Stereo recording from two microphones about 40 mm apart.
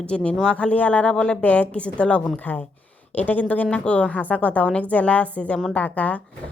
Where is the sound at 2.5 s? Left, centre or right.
Left.